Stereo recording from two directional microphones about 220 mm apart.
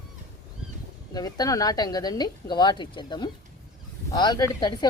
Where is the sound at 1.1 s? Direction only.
15° left (ahead or behind).